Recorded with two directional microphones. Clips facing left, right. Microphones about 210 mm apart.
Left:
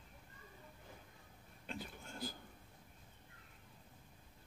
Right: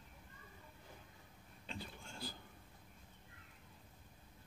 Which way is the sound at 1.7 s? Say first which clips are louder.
Left 2 dB; 5° left (ahead or behind).